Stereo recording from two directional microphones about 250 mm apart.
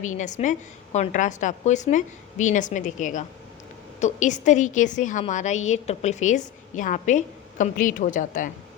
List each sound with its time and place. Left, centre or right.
0.0 s a woman's voice: left